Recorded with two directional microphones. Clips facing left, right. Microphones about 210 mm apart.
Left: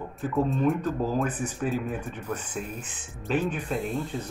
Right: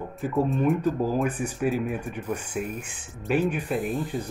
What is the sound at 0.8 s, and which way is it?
Speech, 10° right (ahead or behind).